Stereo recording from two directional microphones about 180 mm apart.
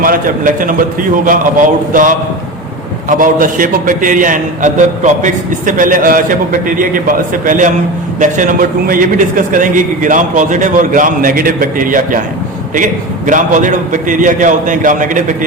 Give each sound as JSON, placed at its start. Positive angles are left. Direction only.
{"t": 0.0, "sound": "a man's voice", "side_deg": -50}